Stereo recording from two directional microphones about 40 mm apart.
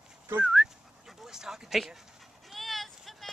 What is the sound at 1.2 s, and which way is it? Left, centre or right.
Speech, centre.